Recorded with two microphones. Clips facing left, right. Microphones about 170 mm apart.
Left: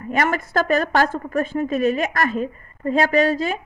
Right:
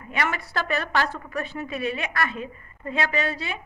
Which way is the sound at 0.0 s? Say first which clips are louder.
Left 7 dB; 45° left (ahead or behind).